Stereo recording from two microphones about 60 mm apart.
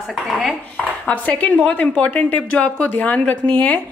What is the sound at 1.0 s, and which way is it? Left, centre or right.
Speech, left.